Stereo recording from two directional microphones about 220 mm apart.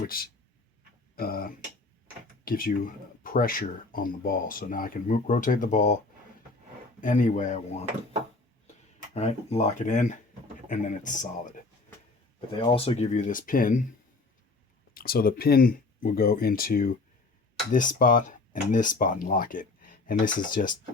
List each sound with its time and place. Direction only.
1.2 s speech: 40° left (ahead or behind)
7.0 s speech: 35° left (ahead or behind)
9.1 s speech: 30° left (ahead or behind)
12.5 s speech: 25° left (ahead or behind); by 13.8 s 40° left (ahead or behind)
14.9 s speech: 40° left (ahead or behind)